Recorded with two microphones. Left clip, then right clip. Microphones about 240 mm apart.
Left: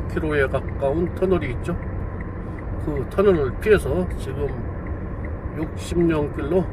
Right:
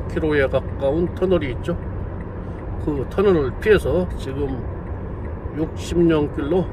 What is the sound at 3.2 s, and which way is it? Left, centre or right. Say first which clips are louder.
Speech: even; centre.